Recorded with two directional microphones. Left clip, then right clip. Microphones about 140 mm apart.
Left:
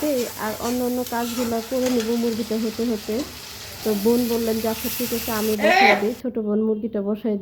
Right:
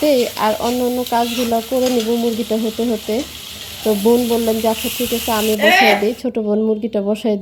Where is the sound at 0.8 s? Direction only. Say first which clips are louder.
Right 7 dB; 30° right (ahead or behind).